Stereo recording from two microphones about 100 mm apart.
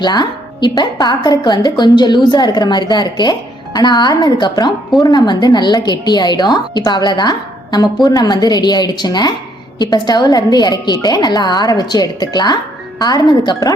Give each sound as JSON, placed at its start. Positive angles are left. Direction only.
{"t": 0.0, "sound": "a woman's voice", "side_deg": 45}